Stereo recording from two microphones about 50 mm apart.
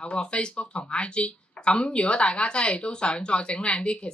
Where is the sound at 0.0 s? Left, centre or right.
Left.